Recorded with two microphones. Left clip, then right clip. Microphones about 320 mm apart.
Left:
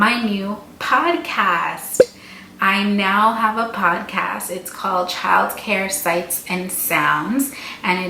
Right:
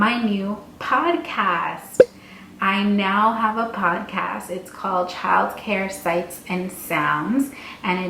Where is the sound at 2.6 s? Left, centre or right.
Centre.